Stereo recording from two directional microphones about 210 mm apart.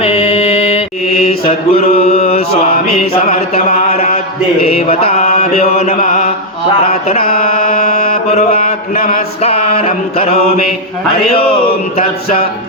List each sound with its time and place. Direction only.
0.0 s mantra: 30° left (ahead or behind)
4.6 s music: 30° left (ahead or behind)
6.0 s mantra: 35° left (ahead or behind)
7.8 s mantra: 45° left (ahead or behind)
9.4 s music: 30° left (ahead or behind)